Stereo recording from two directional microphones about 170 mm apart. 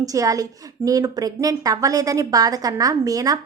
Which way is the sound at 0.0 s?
20° right (ahead or behind).